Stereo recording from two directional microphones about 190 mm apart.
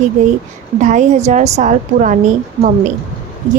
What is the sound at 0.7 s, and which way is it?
A woman's voice, 40° right (ahead or behind).